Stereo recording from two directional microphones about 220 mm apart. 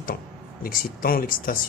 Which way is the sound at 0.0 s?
40° left (ahead or behind).